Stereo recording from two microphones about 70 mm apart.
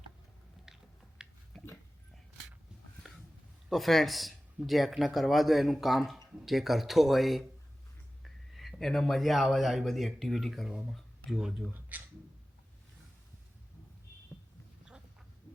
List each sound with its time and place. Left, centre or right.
0.7 s biting: centre
1.5 s dog: centre
3.7 s speech: centre
10.7 s speech: centre
11.7 s speech: right